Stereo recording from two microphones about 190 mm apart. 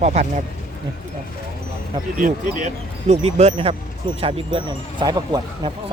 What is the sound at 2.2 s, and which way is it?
Speech, 45° right (ahead or behind).